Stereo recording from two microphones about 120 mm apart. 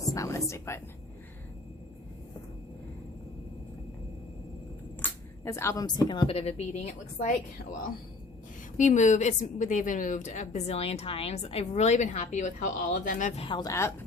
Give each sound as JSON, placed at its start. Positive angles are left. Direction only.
{"t": 0.1, "sound": "whispering", "side_deg": 25}
{"t": 5.0, "sound": "a sound", "side_deg": 25}
{"t": 5.8, "sound": "speech", "side_deg": 35}
{"t": 6.2, "sound": "a woman's voice", "side_deg": 60}
{"t": 8.8, "sound": "a woman's voice", "side_deg": 90}
{"t": 13.4, "sound": "a woman's voice", "side_deg": 45}
{"t": 13.7, "sound": "speech", "side_deg": 25}